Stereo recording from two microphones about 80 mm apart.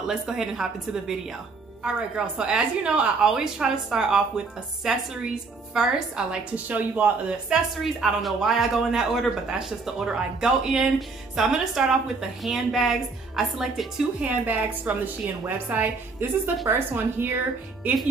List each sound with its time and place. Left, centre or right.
0.0 s a woman's voice: centre
6.5 s speech: centre
14.2 s a woman's voice: centre